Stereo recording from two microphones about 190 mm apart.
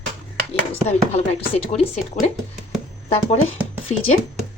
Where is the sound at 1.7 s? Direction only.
35° left (ahead or behind).